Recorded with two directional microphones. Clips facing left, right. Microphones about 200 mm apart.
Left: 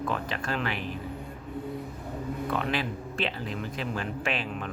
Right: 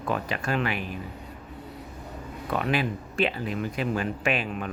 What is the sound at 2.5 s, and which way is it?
Speech, 15° right (ahead or behind).